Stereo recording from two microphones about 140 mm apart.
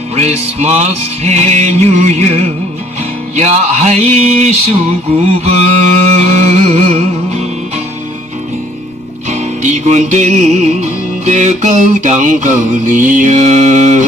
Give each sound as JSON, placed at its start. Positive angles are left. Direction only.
{"t": 0.1, "sound": "music", "side_deg": -55}
{"t": 3.3, "sound": "mantra", "side_deg": -55}
{"t": 9.3, "sound": "music", "side_deg": -55}